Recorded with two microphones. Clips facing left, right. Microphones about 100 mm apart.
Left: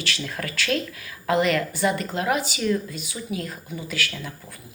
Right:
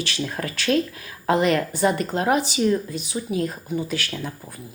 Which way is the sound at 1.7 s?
40° right (ahead or behind).